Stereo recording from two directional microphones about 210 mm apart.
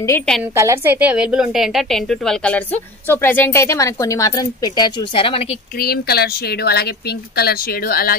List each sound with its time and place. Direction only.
0.6 s a woman's voice: 10° right (ahead or behind); by 5.6 s 25° left (ahead or behind)
5.8 s speech: 50° left (ahead or behind)